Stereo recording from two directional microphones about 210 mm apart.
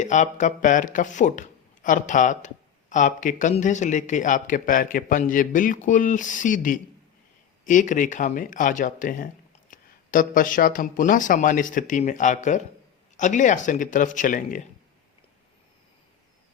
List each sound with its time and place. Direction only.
0.0 s speech: 35° left (ahead or behind)